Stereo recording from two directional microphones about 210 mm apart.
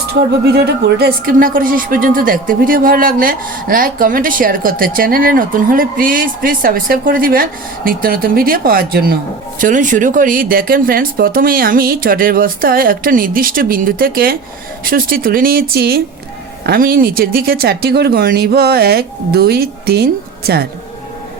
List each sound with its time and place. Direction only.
0.1 s speech: 50° right (ahead or behind)